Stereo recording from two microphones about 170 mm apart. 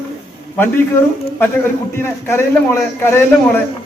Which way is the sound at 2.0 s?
15° left (ahead or behind).